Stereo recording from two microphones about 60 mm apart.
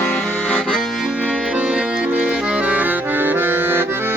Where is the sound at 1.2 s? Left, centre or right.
Centre.